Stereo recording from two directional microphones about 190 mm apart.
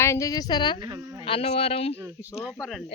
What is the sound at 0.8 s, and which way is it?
Insect, 20° right (ahead or behind).